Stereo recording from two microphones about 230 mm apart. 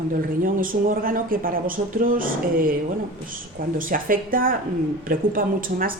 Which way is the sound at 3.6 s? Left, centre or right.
Right.